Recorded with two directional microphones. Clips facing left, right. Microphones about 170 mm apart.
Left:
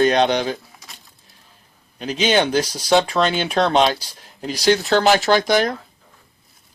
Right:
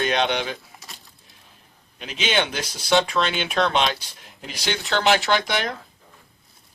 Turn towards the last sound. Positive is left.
turn(degrees=40)  # may be behind; listen again after turning